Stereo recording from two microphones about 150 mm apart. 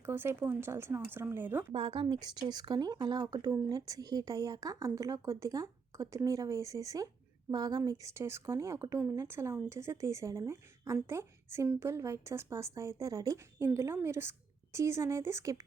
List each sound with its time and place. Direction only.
0.0 s speech: 15° right (ahead or behind)
1.7 s speech: 35° right (ahead or behind); by 15.6 s 20° right (ahead or behind)